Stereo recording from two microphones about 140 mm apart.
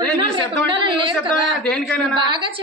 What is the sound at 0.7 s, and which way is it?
Speech, 35° right (ahead or behind).